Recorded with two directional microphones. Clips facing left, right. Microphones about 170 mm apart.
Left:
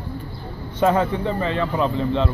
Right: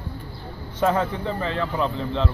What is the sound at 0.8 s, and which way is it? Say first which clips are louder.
A man's voice: left 3 dB; 10° left (ahead or behind).